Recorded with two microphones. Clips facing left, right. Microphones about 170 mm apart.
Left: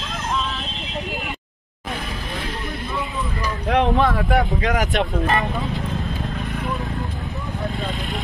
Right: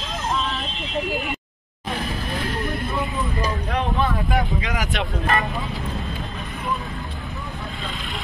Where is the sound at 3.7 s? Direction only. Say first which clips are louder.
Left 8 dB; 75° left (ahead or behind).